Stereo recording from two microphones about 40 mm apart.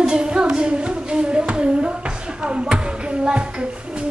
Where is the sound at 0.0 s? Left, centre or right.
Right.